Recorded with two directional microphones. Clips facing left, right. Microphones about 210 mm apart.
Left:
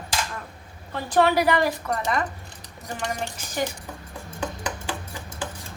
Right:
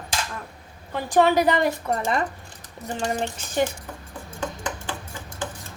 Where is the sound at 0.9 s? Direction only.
15° right (ahead or behind); by 3.3 s 30° right (ahead or behind).